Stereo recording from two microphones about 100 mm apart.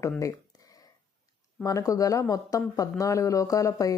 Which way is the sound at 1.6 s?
35° left (ahead or behind).